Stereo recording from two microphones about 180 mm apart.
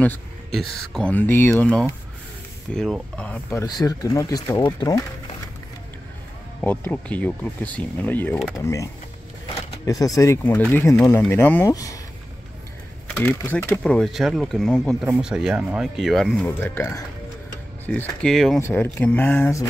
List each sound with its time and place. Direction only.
0.0 s speech: 5° left (ahead or behind); by 5.0 s 20° left (ahead or behind)
6.6 s speech: 10° left (ahead or behind)
13.1 s speech: 10° left (ahead or behind)